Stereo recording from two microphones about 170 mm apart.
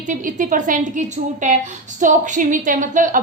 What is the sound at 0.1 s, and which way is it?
A woman's voice, 50° right (ahead or behind).